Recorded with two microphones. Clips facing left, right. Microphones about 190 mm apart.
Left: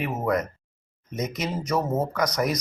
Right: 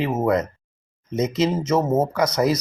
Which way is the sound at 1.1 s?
25° right (ahead or behind).